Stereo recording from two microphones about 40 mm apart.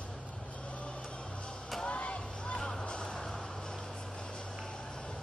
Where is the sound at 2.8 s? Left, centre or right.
Left.